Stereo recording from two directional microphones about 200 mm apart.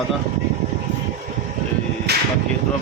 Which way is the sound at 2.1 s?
55° right (ahead or behind).